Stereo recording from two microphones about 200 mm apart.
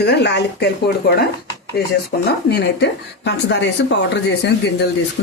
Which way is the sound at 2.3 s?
55° left (ahead or behind).